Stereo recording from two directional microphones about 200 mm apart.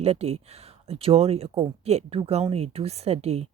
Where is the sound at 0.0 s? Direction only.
30° right (ahead or behind).